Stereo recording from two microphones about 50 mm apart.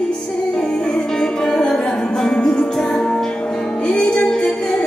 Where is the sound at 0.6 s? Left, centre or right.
Centre.